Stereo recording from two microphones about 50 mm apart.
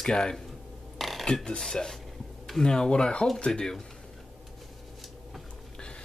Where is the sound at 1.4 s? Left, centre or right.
Centre.